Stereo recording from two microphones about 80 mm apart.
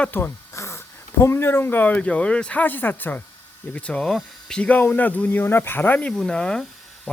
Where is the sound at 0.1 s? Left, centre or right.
Left; by 4.8 s centre.